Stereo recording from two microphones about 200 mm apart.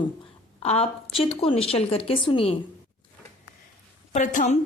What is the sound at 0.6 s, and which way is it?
A woman's voice, 30° left (ahead or behind).